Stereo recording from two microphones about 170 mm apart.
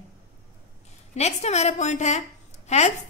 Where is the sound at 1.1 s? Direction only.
40° left (ahead or behind).